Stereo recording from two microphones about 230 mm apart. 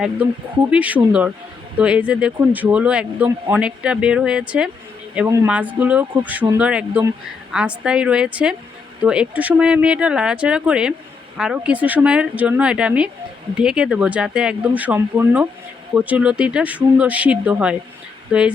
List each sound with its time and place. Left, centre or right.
0.7 s a man's voice: centre